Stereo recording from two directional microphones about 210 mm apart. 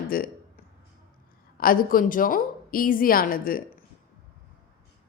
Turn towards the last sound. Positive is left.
turn(degrees=40)  # may be behind; listen again after turning